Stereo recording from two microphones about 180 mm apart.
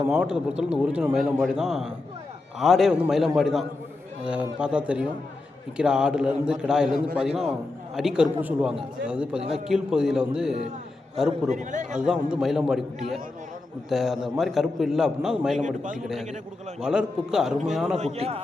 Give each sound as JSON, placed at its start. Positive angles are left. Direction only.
{"t": 0.0, "sound": "a man's voice", "side_deg": -5}
{"t": 11.5, "sound": "speech", "side_deg": -45}
{"t": 11.9, "sound": "a man's voice", "side_deg": -5}
{"t": 15.6, "sound": "speech", "side_deg": -45}
{"t": 16.0, "sound": "a man's voice", "side_deg": 0}
{"t": 17.9, "sound": "a man's voice", "side_deg": -35}